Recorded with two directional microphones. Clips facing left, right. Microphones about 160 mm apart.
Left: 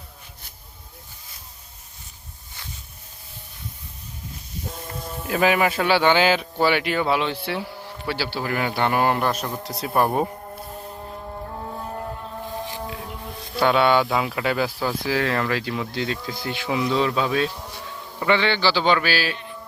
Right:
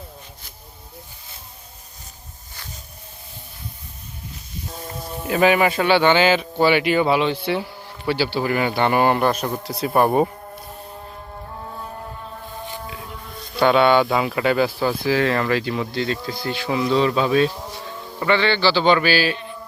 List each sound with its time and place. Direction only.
5.3 s speech: centre (ahead or behind)
13.6 s speech: 5° left (ahead or behind)
16.3 s speech: 20° left (ahead or behind)
16.6 s speech: 10° left (ahead or behind)
18.3 s speech: 15° left (ahead or behind)